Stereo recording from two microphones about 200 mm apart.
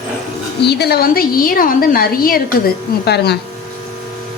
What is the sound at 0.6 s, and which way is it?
Speech, 55° left (ahead or behind).